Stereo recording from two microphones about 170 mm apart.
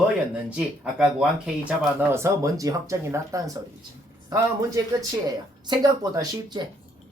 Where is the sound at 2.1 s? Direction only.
15° right (ahead or behind).